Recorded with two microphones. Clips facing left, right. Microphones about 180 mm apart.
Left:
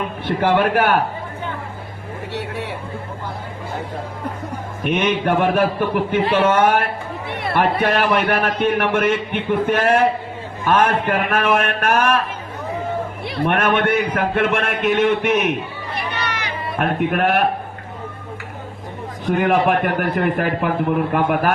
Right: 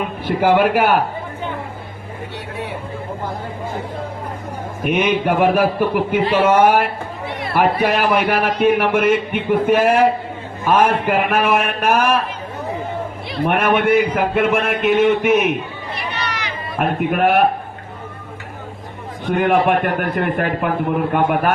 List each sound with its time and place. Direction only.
0.3 s a man's voice: 10° right (ahead or behind)
2.3 s vehicle: 75° left (ahead or behind)
4.9 s a man's voice: 10° right (ahead or behind)
7.5 s a man's voice: 5° right (ahead or behind)
13.4 s a man's voice: 5° right (ahead or behind)
16.1 s run: 55° left (ahead or behind)
16.7 s a man's voice: centre (ahead or behind)
19.2 s a man's voice: centre (ahead or behind)